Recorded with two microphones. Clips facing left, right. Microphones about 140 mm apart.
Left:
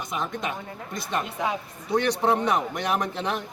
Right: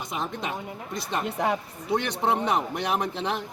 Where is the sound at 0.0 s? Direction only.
30° right (ahead or behind).